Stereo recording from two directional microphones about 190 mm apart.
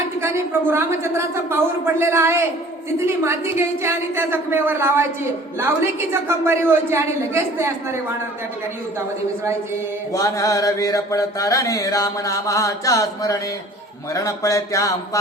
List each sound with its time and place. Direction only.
0.2 s a woman's voice: 15° right (ahead or behind)
10.1 s mantra: 15° left (ahead or behind)